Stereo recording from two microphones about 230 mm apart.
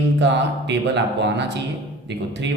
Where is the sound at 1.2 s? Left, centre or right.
Right.